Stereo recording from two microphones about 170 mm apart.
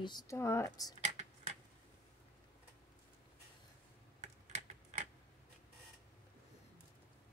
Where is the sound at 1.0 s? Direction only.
45° right (ahead or behind).